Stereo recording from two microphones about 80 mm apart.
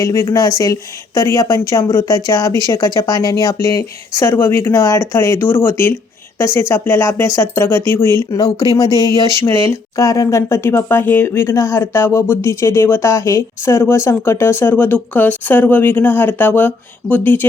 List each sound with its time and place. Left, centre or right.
0.0 s speech: left
4.3 s speech: left